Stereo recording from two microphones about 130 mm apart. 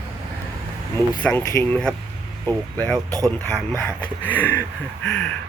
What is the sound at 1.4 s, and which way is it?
Speech, 25° left (ahead or behind).